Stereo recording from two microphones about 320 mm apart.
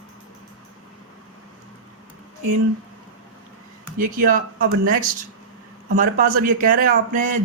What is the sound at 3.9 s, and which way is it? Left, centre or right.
A man's voice, right.